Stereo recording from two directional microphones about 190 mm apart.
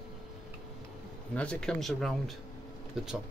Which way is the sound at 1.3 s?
5° left (ahead or behind).